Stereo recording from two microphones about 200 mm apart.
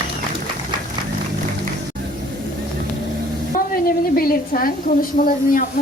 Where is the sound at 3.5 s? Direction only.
45° left (ahead or behind).